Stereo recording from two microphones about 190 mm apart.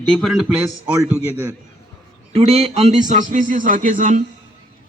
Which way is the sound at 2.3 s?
30° right (ahead or behind).